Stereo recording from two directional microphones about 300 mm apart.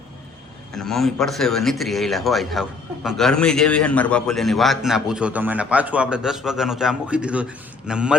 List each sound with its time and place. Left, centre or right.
0.7 s a man's voice: centre